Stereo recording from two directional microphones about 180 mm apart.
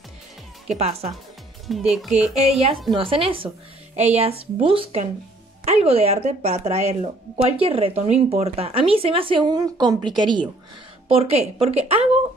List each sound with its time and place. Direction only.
0.7 s speech: 35° right (ahead or behind)
1.7 s speech: centre (ahead or behind)
2.9 s speech: 30° right (ahead or behind)